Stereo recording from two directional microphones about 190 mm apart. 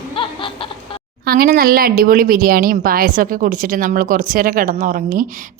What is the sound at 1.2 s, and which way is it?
Speech, 50° right (ahead or behind).